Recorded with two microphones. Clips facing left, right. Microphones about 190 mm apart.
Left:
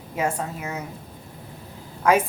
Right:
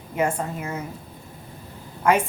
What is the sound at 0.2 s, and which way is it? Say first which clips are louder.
Speech: right 2 dB; 5° left (ahead or behind).